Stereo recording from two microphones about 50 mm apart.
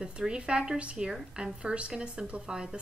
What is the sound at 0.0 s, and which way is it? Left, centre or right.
A woman's voice, centre.